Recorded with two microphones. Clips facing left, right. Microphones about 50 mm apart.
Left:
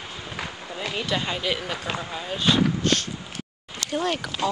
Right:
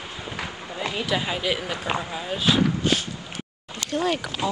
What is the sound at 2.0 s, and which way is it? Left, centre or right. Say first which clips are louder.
Speech: left 3 dB; centre.